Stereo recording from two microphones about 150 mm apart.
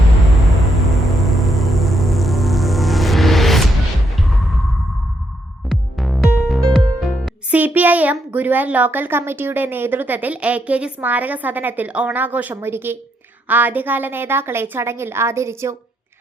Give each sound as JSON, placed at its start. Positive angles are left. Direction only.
{"t": 0.4, "sound": "music", "side_deg": 0}
{"t": 5.6, "sound": "music", "side_deg": 0}
{"t": 7.5, "sound": "a child's voice", "side_deg": -10}